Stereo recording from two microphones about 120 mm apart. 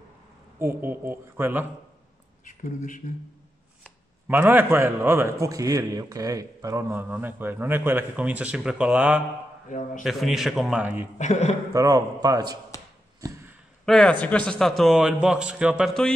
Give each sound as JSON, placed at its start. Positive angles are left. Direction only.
{"t": 0.6, "sound": "a man's voice", "side_deg": -20}
{"t": 2.4, "sound": "speech", "side_deg": 90}
{"t": 4.3, "sound": "a man's voice", "side_deg": -15}
{"t": 9.7, "sound": "a man's voice", "side_deg": 90}
{"t": 10.0, "sound": "a man's voice", "side_deg": 0}
{"t": 11.1, "sound": "a man's voice", "side_deg": 75}
{"t": 11.7, "sound": "a man's voice", "side_deg": -30}
{"t": 13.2, "sound": "a sound", "side_deg": -20}
{"t": 13.8, "sound": "a man's voice", "side_deg": 5}
{"t": 15.9, "sound": "a man's voice", "side_deg": 5}